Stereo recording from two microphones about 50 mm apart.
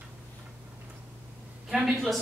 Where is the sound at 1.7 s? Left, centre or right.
Centre.